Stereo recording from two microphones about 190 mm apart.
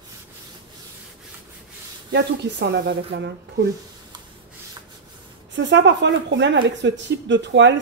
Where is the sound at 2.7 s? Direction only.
65° right (ahead or behind).